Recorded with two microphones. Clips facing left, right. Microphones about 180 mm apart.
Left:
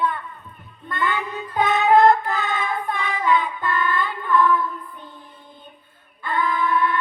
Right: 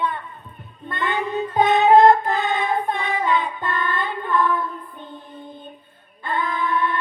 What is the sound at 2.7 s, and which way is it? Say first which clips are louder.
Child singing: right 3 dB; 20° right (ahead or behind).